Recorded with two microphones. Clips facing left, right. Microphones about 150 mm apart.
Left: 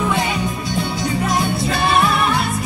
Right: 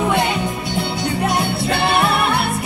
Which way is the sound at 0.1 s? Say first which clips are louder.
Right 2 dB; 65° right (ahead or behind).